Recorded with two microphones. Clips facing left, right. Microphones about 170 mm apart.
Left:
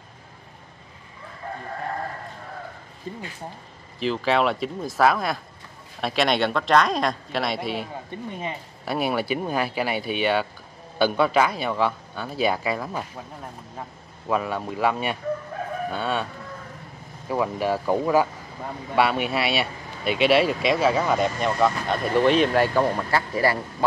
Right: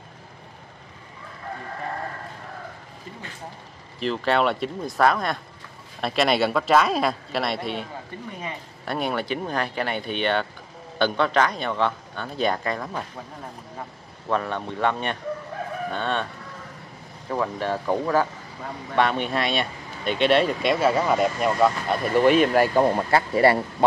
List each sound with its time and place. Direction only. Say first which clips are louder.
4.0 s speech: even; centre (ahead or behind)
8.8 s speech: left 2 dB; 5° left (ahead or behind)
14.3 s speech: left 1 dB; 5° left (ahead or behind)
17.3 s speech: left 2 dB; 10° left (ahead or behind)
22.8 s speech: right 3 dB; 25° right (ahead or behind)